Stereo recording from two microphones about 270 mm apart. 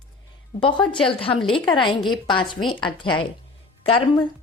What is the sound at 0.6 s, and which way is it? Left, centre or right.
Speech, centre.